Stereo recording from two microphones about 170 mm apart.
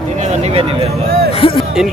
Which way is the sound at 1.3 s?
30° left (ahead or behind).